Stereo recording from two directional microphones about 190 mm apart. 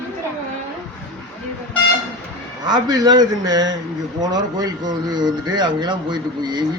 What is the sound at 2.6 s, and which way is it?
Speech, 20° right (ahead or behind).